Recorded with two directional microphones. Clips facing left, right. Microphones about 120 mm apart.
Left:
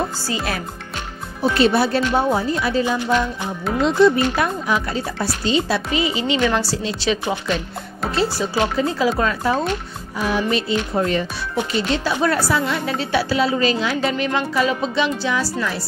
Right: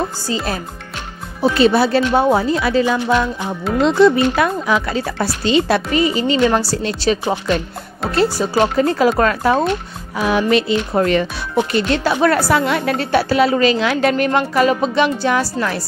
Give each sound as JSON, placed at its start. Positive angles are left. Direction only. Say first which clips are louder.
{"t": 0.3, "sound": "speech", "louder": "right 3 dB", "side_deg": -30}
{"t": 1.7, "sound": "speech", "louder": "right 3 dB", "side_deg": -90}
{"t": 6.7, "sound": "a woman's voice", "louder": "right 3 dB", "side_deg": -60}
{"t": 7.0, "sound": "speech", "louder": "right 4 dB", "side_deg": -40}
{"t": 8.1, "sound": "a woman's voice", "louder": "right 5 dB", "side_deg": -50}
{"t": 10.1, "sound": "speech", "louder": "right 5 dB", "side_deg": -75}
{"t": 11.7, "sound": "a woman's voice", "louder": "right 2 dB", "side_deg": -60}
{"t": 14.1, "sound": "a woman's voice", "louder": "right 5 dB", "side_deg": -55}